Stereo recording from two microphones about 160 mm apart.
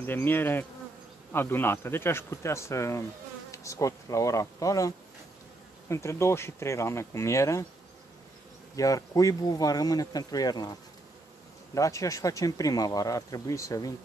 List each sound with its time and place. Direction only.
0.0 s speech: 10° left (ahead or behind)
8.7 s speech: 20° left (ahead or behind)